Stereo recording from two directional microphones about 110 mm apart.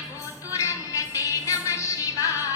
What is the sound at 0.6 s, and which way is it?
Music, 30° left (ahead or behind).